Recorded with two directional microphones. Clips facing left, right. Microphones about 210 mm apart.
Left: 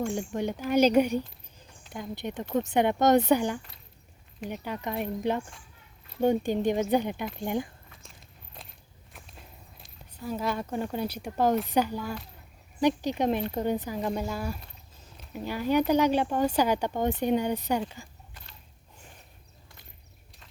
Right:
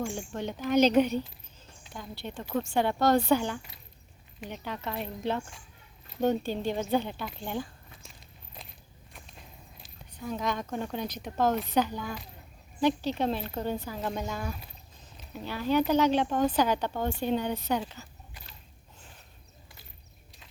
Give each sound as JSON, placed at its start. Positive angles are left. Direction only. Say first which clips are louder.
{"t": 0.3, "sound": "a woman's voice", "louder": "even", "side_deg": 10}
{"t": 9.1, "sound": "a sound", "louder": "left 1 dB", "side_deg": 0}
{"t": 11.7, "sound": "a woman's voice", "louder": "left 1 dB", "side_deg": 10}
{"t": 12.8, "sound": "a woman's voice", "louder": "left 2 dB", "side_deg": 15}